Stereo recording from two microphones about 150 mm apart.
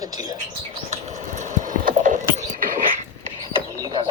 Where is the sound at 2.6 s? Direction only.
70° right (ahead or behind).